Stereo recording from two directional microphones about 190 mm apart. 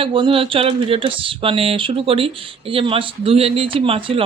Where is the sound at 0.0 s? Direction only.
30° right (ahead or behind).